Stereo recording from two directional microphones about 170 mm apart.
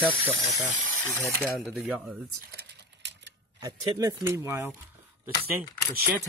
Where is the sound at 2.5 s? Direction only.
80° right.